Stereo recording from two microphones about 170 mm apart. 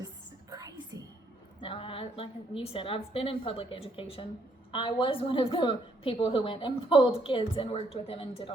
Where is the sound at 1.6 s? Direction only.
30° left (ahead or behind).